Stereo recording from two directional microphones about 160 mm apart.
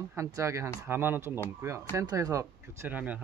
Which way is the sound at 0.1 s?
20° right (ahead or behind).